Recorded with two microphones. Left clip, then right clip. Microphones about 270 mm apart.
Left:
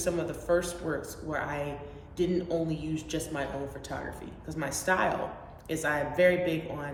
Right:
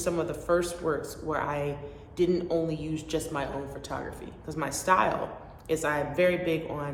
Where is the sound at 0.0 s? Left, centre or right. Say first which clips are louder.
Right 2 dB; centre.